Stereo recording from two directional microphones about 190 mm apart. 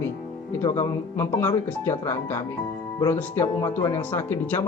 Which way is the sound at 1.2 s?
10° left (ahead or behind).